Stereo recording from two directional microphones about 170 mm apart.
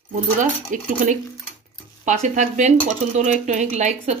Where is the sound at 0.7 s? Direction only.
50° right (ahead or behind).